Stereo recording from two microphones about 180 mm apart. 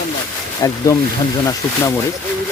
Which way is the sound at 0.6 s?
20° left (ahead or behind).